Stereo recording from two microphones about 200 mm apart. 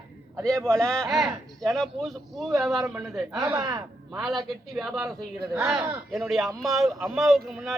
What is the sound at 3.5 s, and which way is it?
Speech, 15° right (ahead or behind).